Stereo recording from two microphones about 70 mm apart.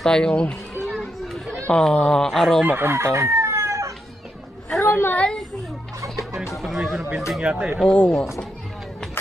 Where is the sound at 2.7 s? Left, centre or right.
Right.